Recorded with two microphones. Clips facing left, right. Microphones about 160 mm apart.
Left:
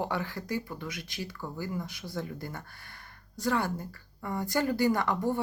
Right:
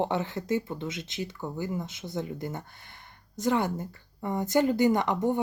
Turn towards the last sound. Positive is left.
turn(degrees=-20)  # may be behind; listen again after turning